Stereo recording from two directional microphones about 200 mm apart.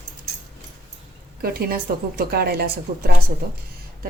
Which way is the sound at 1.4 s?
45° right (ahead or behind).